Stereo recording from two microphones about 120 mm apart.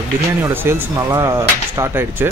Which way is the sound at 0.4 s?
20° right (ahead or behind).